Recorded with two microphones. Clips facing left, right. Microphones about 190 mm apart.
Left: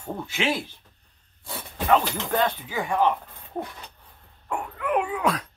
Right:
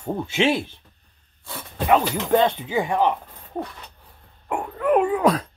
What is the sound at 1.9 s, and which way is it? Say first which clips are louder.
Speech: right 4 dB; 20° right (ahead or behind).